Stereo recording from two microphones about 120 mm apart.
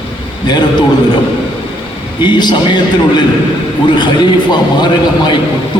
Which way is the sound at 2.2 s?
40° left (ahead or behind).